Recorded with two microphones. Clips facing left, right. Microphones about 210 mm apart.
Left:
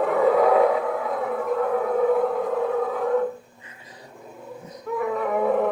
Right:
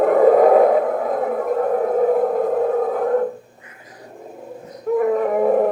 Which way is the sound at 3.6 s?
25° left (ahead or behind).